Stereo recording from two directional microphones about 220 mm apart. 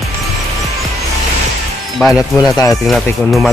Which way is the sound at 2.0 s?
Centre (ahead or behind).